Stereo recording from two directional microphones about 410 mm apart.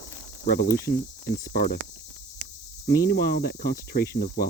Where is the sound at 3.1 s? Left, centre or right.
Left.